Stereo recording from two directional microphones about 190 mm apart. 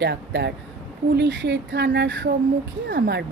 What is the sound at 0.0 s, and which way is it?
Speech, 65° right (ahead or behind).